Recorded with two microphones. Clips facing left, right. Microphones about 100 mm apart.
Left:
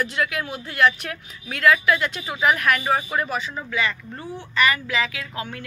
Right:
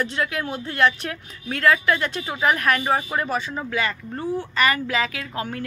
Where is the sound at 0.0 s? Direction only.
30° right (ahead or behind).